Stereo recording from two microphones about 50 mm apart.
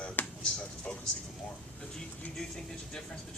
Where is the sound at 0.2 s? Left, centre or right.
Left.